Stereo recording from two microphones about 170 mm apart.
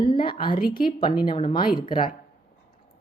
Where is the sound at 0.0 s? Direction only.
30° left (ahead or behind).